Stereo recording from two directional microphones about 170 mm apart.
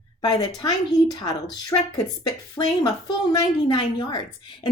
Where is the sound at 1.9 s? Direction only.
25° left (ahead or behind).